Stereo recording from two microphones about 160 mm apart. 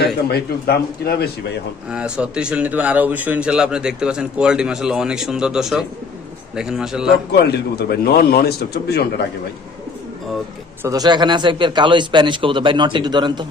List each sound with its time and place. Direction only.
0.0 s a man's voice: 80° left
1.9 s a man's voice: 5° right (ahead or behind)
7.3 s a man's voice: 90° left
10.8 s speech: 25° right (ahead or behind)